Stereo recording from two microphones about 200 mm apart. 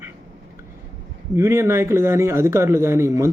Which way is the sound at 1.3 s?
15° right (ahead or behind).